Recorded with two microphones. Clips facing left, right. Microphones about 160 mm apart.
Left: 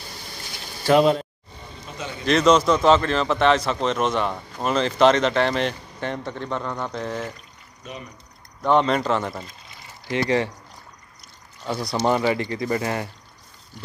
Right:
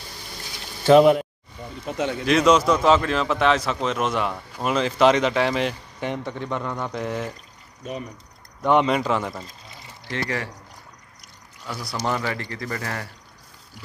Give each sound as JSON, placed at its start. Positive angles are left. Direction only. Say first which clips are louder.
{"t": 0.8, "sound": "speech", "louder": "right 3 dB", "side_deg": -20}
{"t": 1.9, "sound": "speech", "louder": "right 9 dB", "side_deg": -70}
{"t": 2.2, "sound": "a man's voice", "louder": "left 1 dB", "side_deg": -5}
{"t": 8.6, "sound": "speech", "louder": "even", "side_deg": -10}
{"t": 10.0, "sound": "speech", "louder": "left 6 dB", "side_deg": 20}
{"t": 11.9, "sound": "speech", "louder": "left 5 dB", "side_deg": 20}